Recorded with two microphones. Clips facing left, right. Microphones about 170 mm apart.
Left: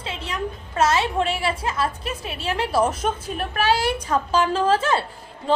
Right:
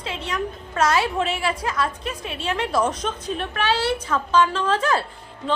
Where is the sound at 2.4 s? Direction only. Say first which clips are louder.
Left 1 dB; 35° left (ahead or behind).